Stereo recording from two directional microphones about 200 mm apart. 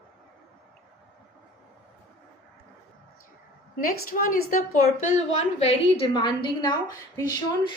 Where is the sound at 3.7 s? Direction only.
45° left (ahead or behind); by 6.7 s 20° left (ahead or behind).